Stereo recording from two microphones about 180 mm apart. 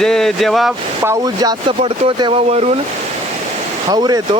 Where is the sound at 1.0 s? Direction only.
20° right (ahead or behind); by 2.8 s 35° right (ahead or behind).